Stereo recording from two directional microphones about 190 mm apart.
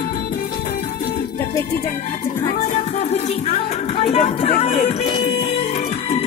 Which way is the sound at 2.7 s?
35° left (ahead or behind).